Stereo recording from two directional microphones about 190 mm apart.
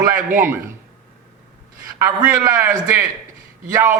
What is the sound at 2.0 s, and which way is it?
A man's voice, 15° right (ahead or behind).